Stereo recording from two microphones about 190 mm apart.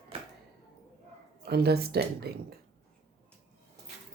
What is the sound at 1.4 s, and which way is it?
Speech, 55° right (ahead or behind).